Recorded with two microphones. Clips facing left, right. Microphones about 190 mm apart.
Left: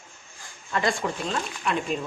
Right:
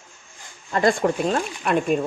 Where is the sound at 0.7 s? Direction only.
45° right (ahead or behind).